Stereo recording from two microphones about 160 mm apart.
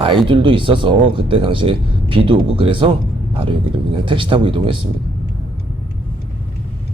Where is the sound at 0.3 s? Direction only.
30° right (ahead or behind).